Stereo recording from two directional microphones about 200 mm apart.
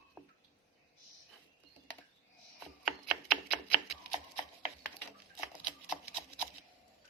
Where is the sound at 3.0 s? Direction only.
5° right (ahead or behind).